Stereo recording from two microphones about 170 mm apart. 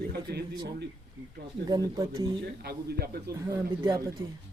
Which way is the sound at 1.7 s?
25° right (ahead or behind).